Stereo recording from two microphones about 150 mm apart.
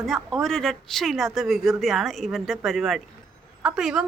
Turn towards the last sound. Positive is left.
turn(degrees=-5)  # may be behind; listen again after turning